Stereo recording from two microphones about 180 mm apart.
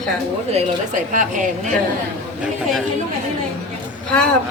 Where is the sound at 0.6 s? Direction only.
45° right (ahead or behind).